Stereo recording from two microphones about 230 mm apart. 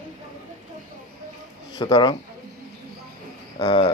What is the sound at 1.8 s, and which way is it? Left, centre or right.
Speech, centre.